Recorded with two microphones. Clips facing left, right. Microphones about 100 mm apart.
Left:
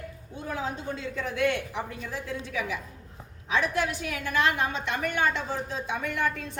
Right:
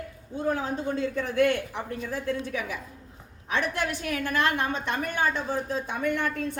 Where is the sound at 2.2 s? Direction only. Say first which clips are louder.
Right 1 dB; 50° right (ahead or behind).